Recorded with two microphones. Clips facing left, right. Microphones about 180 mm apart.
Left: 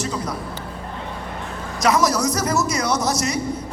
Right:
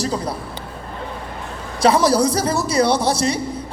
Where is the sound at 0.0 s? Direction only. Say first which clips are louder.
Right 3 dB; 35° right (ahead or behind).